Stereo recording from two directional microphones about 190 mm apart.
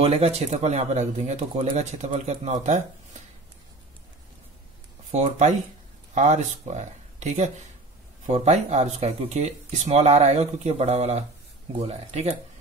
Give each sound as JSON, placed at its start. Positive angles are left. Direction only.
{"t": 0.0, "sound": "speech", "side_deg": -35}
{"t": 5.1, "sound": "speech", "side_deg": -35}